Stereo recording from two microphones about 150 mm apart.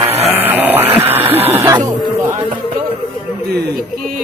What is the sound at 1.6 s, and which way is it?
Music, 25° right (ahead or behind).